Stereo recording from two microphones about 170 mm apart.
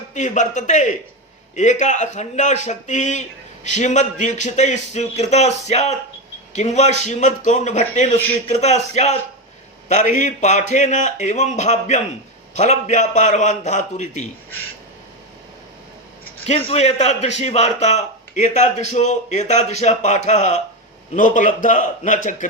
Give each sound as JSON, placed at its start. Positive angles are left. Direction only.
{"t": 0.1, "sound": "a man's voice", "side_deg": 45}
{"t": 16.5, "sound": "a man's voice", "side_deg": 35}